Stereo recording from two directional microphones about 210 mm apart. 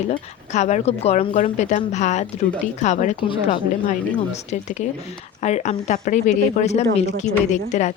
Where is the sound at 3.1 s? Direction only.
20° left (ahead or behind).